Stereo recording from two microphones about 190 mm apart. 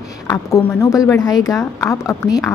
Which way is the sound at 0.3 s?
15° left (ahead or behind).